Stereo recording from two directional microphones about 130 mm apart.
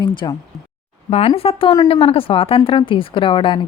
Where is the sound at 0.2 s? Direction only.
35° left (ahead or behind).